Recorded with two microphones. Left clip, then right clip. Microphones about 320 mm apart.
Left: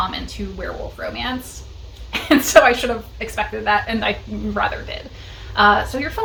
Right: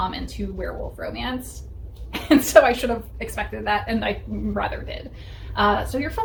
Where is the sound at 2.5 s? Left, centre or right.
Right.